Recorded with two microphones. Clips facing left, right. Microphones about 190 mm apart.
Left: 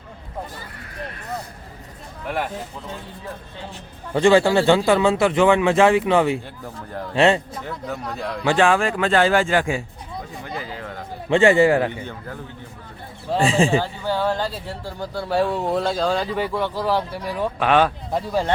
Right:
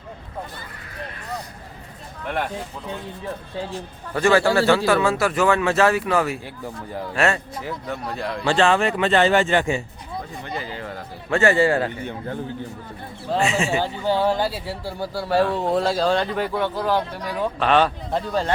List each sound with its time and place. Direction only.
2.2 s speech: 5° left (ahead or behind)
4.1 s speech: 20° left (ahead or behind)
7.6 s speech: 5° right (ahead or behind)
8.4 s speech: 10° left (ahead or behind)
8.8 s speech: 5° right (ahead or behind)
11.3 s speech: 20° left (ahead or behind)
13.4 s speech: 30° left (ahead or behind)
13.7 s speech: 15° right (ahead or behind); by 18.4 s 5° left (ahead or behind)